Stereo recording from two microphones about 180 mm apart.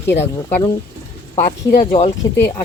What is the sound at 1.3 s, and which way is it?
Speech, 35° left (ahead or behind).